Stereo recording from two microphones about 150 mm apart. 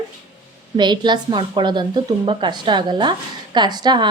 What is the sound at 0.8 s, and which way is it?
A woman's voice, 30° right (ahead or behind).